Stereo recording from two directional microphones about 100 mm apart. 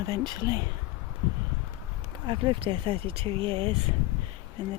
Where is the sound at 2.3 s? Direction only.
55° right (ahead or behind).